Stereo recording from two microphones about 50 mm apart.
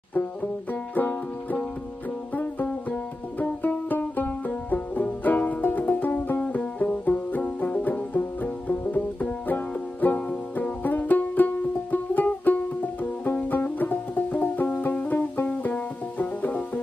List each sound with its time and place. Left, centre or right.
0.1 s banjo: left
2.3 s music: left
6.4 s music: left
15.4 s music: left